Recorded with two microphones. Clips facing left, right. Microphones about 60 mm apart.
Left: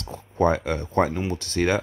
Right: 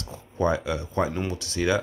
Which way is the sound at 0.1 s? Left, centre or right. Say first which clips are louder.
Left 3 dB; left.